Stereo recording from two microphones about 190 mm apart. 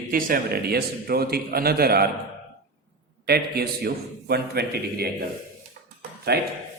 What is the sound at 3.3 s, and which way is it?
Speech, 55° right (ahead or behind).